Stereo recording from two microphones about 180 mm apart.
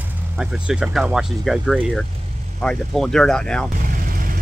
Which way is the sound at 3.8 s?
50° right (ahead or behind).